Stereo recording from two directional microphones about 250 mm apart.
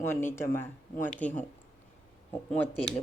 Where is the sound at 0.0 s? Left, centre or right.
Centre.